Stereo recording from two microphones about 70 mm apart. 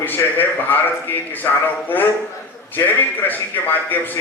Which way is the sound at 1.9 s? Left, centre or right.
Left.